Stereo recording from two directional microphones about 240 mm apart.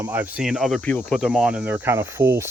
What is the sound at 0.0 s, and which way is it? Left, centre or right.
Speech, centre.